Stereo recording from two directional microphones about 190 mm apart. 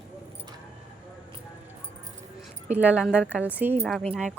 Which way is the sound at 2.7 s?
5° right (ahead or behind).